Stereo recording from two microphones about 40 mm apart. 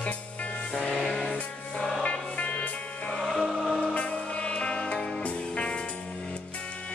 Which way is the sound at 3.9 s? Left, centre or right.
Left.